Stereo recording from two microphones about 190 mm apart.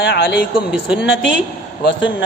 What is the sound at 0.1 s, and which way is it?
Speech, 55° left (ahead or behind).